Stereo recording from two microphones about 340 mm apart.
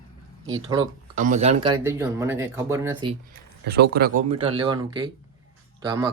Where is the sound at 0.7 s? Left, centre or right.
Centre.